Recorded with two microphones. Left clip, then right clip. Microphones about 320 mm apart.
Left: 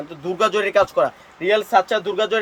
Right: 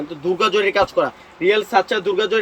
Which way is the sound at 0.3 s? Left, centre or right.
Left.